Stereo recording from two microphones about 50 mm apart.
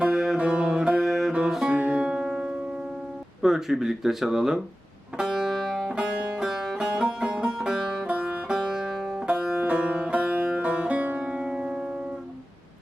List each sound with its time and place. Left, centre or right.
0.0 s music: centre
0.3 s music: right
1.7 s music: right
3.4 s speech: centre
5.1 s music: centre
5.9 s music: centre
9.2 s music: right